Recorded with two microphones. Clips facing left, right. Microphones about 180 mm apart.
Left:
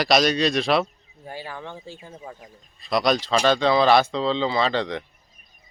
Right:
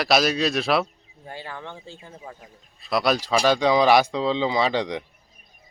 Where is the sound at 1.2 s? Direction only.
10° left (ahead or behind).